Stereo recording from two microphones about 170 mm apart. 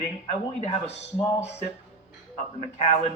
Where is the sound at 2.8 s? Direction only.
40° left (ahead or behind).